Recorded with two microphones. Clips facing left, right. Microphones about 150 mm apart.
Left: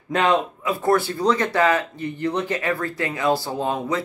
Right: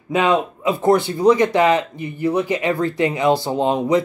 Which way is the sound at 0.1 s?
10° right (ahead or behind).